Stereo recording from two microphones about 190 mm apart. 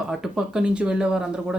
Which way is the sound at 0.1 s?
Centre (ahead or behind).